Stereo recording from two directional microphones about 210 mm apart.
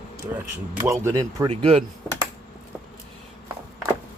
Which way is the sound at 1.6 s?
30° right (ahead or behind).